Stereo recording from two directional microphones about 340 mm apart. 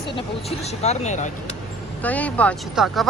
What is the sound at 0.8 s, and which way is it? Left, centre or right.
Speech, centre.